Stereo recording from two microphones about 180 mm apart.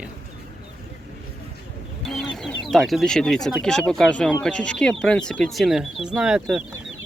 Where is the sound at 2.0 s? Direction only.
Centre (ahead or behind).